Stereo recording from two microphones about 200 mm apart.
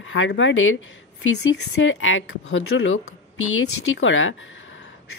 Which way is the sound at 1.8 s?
70° left (ahead or behind).